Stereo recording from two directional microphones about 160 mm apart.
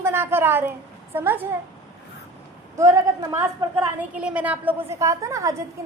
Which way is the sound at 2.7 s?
20° right (ahead or behind).